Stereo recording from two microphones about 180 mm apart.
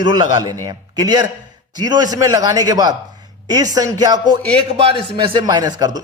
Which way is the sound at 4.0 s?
20° right (ahead or behind).